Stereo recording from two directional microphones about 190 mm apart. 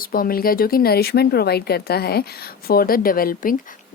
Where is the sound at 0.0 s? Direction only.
50° left (ahead or behind).